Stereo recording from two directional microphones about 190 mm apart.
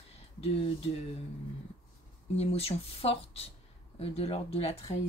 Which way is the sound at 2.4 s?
30° left (ahead or behind).